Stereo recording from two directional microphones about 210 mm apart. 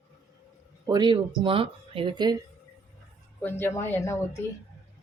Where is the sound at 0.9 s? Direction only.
20° right (ahead or behind).